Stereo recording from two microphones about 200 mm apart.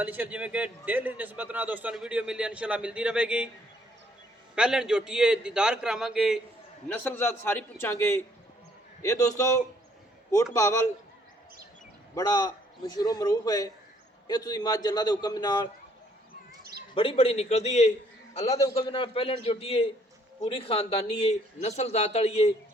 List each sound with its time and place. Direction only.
0.0 s a man's voice: 10° right (ahead or behind)
4.5 s a man's voice: 5° right (ahead or behind)
6.8 s a man's voice: 10° left (ahead or behind)
12.1 s a man's voice: 20° left (ahead or behind)
16.9 s a man's voice: 25° left (ahead or behind)